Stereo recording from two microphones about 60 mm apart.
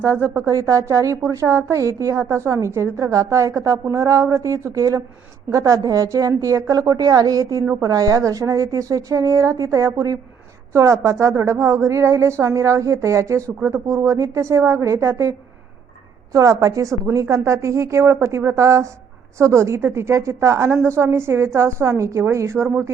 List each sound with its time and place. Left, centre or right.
0.0 s a woman's voice: right
3.1 s a woman's voice: right
5.5 s a woman's voice: right
16.3 s a woman's voice: right